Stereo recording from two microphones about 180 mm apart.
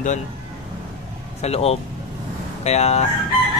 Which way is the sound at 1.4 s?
35° left (ahead or behind).